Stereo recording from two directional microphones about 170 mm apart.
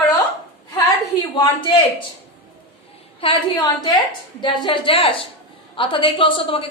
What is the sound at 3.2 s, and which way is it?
Speech, 30° left (ahead or behind).